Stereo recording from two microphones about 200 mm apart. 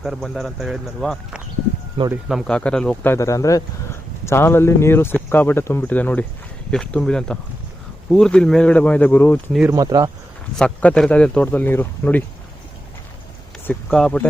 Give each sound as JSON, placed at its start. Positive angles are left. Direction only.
{"t": 0.0, "sound": "a man's voice", "side_deg": 0}
{"t": 9.7, "sound": "speech", "side_deg": -20}
{"t": 10.6, "sound": "a man's voice", "side_deg": 5}
{"t": 13.7, "sound": "a man's voice", "side_deg": 5}